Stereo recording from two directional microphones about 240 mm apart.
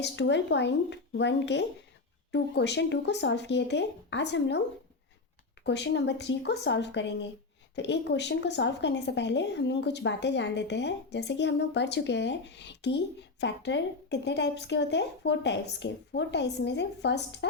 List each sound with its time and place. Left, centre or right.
0.0 s a woman's voice: left
5.6 s a woman's voice: left